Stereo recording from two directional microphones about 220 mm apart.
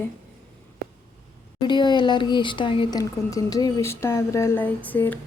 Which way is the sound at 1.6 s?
20° left (ahead or behind).